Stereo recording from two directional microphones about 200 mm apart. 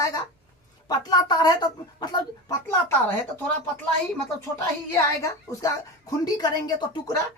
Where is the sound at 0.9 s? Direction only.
20° left (ahead or behind).